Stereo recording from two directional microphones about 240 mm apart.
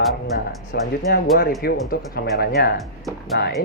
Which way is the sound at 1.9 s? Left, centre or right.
Left.